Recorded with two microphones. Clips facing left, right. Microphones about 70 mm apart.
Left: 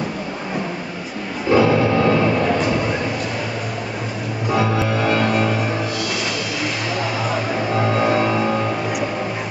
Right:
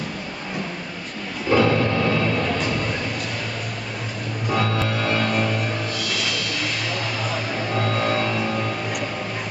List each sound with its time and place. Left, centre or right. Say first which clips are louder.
1.5 s music: left 4 dB; centre
2.6 s a sound: left 5 dB; centre
4.5 s music: left 4 dB; centre
7.2 s music: left 5 dB; centre